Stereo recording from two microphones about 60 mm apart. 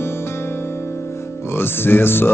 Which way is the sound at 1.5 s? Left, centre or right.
Left.